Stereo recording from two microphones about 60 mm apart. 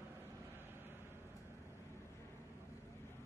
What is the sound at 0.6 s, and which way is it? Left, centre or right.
Vehicle, right.